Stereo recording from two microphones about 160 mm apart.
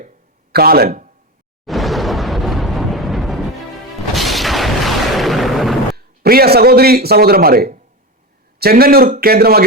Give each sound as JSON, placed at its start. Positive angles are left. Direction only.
{"t": 0.5, "sound": "a man's voice", "side_deg": -70}
{"t": 1.6, "sound": "a sound", "side_deg": 0}
{"t": 4.1, "sound": "artillery fire", "side_deg": 0}
{"t": 6.2, "sound": "a man's voice", "side_deg": -70}